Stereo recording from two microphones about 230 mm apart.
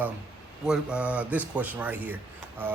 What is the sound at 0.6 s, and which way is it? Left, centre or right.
Speech, centre.